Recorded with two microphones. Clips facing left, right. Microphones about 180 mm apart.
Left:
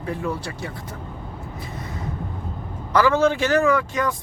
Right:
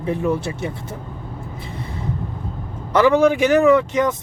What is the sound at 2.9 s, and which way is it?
Speech, 20° right (ahead or behind).